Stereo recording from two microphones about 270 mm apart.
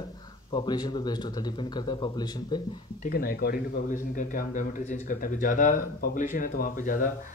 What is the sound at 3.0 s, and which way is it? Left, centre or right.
Speech, left.